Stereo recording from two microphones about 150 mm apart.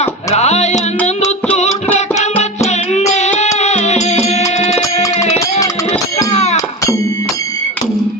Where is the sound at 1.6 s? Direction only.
50° left (ahead or behind).